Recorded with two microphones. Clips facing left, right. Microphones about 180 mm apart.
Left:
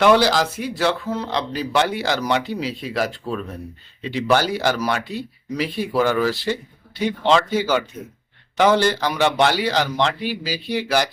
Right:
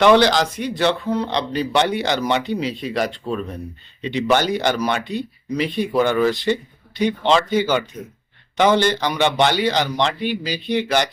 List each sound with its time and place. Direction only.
0.0 s speech: 5° left (ahead or behind)